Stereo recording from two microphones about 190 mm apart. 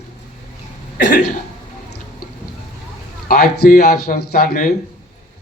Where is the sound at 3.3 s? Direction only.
55° left (ahead or behind).